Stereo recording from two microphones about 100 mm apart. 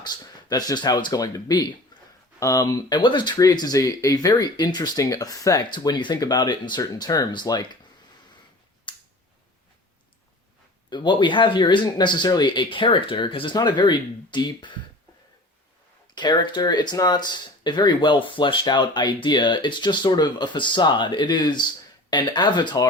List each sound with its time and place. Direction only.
0.0 s speech: 45° left (ahead or behind)
1.9 s a sound: 50° left (ahead or behind)
2.4 s speech: 40° left (ahead or behind)
3.3 s speech: 40° left (ahead or behind)
5.7 s speech: 50° left (ahead or behind)
8.9 s a sound: 50° left (ahead or behind)
10.8 s speech: 50° left (ahead or behind)
13.6 s speech: 50° left (ahead or behind)
16.1 s speech: 50° left (ahead or behind)